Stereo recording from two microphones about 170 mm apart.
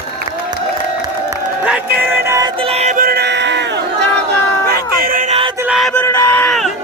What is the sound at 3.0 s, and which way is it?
Crowd, 65° right (ahead or behind).